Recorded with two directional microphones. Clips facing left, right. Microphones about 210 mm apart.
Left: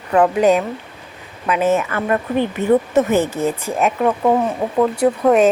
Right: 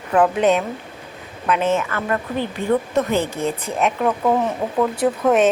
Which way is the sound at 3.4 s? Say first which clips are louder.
Left 3 dB; centre (ahead or behind).